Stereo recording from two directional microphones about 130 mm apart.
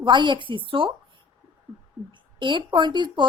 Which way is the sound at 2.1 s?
40° right (ahead or behind).